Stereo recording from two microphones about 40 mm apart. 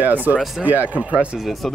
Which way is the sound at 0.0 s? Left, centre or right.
Right.